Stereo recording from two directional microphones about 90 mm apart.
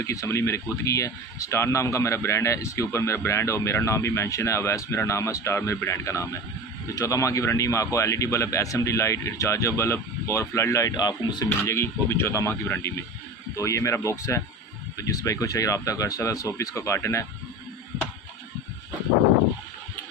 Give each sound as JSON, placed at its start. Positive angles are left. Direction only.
{"t": 0.0, "sound": "speech", "side_deg": 35}
{"t": 10.9, "sound": "speech", "side_deg": 50}
{"t": 11.6, "sound": "speech", "side_deg": 30}
{"t": 13.6, "sound": "speech", "side_deg": 35}